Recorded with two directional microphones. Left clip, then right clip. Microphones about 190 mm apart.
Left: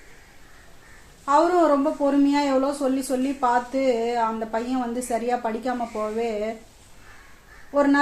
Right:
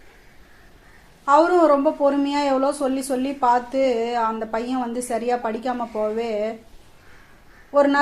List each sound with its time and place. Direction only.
1.2 s a woman's voice: 30° right (ahead or behind)